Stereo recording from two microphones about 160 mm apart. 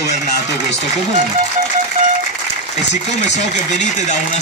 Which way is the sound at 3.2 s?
45° left (ahead or behind).